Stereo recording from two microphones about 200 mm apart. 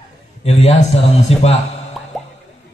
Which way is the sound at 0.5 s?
35° left (ahead or behind).